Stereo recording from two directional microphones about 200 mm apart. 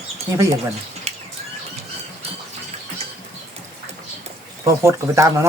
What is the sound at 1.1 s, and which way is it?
Horse, 30° right (ahead or behind).